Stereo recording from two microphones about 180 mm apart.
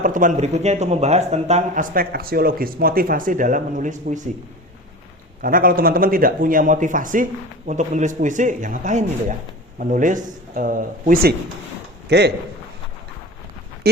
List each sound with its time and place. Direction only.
0.0 s speech: 45° right (ahead or behind)
5.4 s speech: 50° right (ahead or behind)
12.0 s speech: 65° right (ahead or behind)
13.8 s a sound: 60° right (ahead or behind)